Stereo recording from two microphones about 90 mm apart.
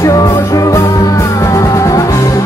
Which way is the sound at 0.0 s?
40° left (ahead or behind).